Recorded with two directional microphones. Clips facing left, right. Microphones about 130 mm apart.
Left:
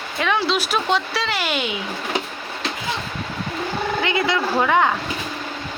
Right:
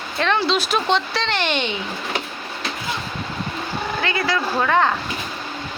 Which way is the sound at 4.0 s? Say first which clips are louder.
Left 1 dB; 20° left (ahead or behind).